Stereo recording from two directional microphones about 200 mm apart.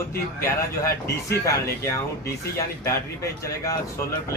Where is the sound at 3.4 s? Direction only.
15° left (ahead or behind).